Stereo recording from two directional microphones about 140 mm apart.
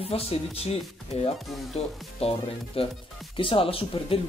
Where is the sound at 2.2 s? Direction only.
45° left (ahead or behind).